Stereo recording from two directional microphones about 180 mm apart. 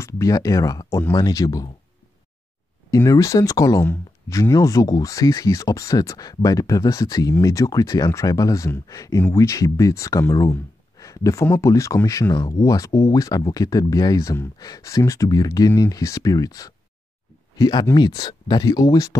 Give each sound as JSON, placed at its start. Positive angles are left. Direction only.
{"t": 0.0, "sound": "speech", "side_deg": 20}
{"t": 2.9, "sound": "speech", "side_deg": 15}